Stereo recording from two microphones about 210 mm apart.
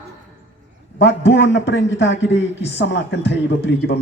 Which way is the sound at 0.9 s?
60° left (ahead or behind).